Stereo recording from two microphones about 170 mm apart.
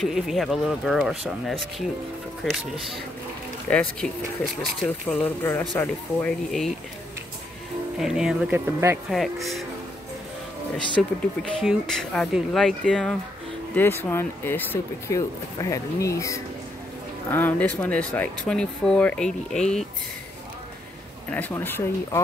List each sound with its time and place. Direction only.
0.0 s speech: centre (ahead or behind)
3.7 s speech: 10° left (ahead or behind)
4.8 s speech: 10° left (ahead or behind)
8.0 s speech: 5° right (ahead or behind)
9.1 s speech: centre (ahead or behind)
11.0 s speech: centre (ahead or behind)
21.3 s speech: 10° left (ahead or behind)